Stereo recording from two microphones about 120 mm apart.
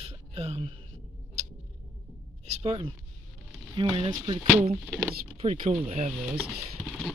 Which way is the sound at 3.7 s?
40° right (ahead or behind).